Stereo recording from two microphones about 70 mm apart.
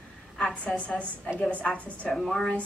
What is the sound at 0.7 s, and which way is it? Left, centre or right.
A woman's voice, centre.